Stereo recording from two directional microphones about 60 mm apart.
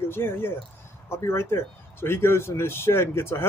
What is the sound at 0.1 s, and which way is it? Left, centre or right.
Speech, left.